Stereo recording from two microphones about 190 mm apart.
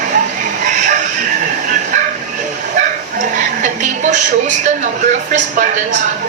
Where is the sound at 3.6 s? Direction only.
40° right (ahead or behind).